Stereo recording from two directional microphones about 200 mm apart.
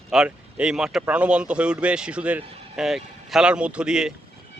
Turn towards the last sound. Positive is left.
turn(degrees=-5)  # may be behind; listen again after turning